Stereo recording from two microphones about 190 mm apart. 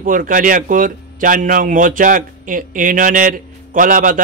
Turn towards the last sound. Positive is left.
turn(degrees=-45)  # may be behind; listen again after turning